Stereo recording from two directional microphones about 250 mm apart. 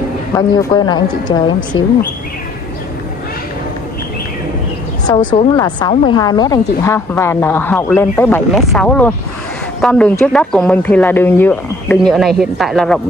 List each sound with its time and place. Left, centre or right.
0.4 s speech: centre
5.0 s a woman's voice: centre